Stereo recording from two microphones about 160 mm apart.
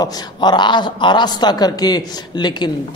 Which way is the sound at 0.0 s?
25° left (ahead or behind).